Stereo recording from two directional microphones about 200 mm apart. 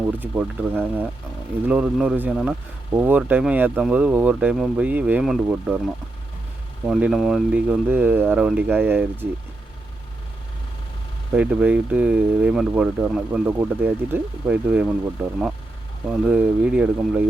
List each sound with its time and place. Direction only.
0.2 s speech: 10° right (ahead or behind)
11.3 s speech: 10° right (ahead or behind)